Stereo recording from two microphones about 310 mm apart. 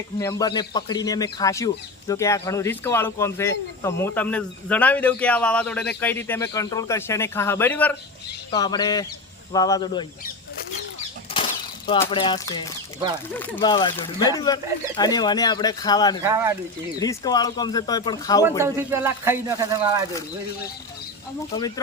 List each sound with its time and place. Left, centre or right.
0.2 s speech: centre
11.3 s speech: centre
16.2 s speech: centre
17.0 s speech: centre
18.6 s speech: centre